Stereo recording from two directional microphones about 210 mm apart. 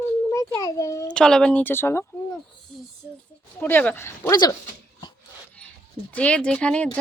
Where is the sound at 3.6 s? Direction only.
10° left (ahead or behind).